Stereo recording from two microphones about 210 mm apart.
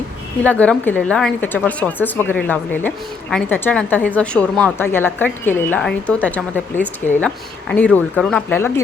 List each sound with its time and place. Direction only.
0.4 s a woman's voice: 5° left (ahead or behind)